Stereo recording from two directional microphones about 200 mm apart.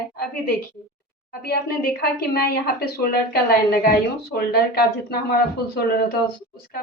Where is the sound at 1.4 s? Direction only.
50° left (ahead or behind).